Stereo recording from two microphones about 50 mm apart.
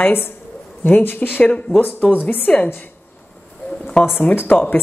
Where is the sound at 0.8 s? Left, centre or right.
Left.